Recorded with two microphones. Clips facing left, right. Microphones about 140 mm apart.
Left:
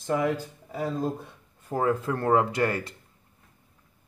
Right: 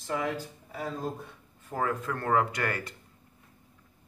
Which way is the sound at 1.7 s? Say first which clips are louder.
Left 5 dB; 30° left (ahead or behind).